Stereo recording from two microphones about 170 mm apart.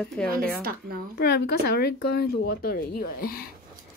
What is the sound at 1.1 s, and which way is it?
Speech, 70° left (ahead or behind).